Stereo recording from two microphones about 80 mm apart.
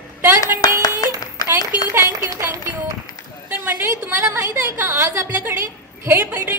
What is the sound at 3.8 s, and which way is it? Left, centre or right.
A woman's voice, right.